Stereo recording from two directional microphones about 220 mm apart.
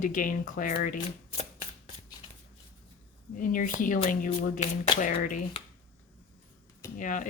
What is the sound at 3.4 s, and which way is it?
Speech, 40° left (ahead or behind).